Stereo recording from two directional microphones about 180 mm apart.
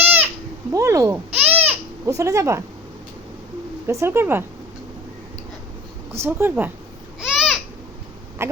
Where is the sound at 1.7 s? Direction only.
15° right (ahead or behind).